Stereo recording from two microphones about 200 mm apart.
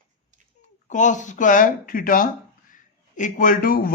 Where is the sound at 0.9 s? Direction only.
40° left (ahead or behind).